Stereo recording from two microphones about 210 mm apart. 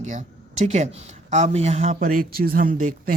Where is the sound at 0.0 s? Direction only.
35° right (ahead or behind).